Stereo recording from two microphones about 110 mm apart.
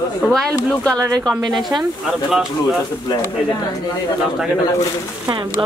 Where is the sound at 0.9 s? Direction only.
30° right (ahead or behind).